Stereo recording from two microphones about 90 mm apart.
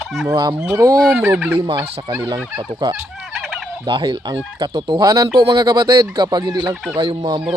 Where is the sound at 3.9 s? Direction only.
55° right (ahead or behind).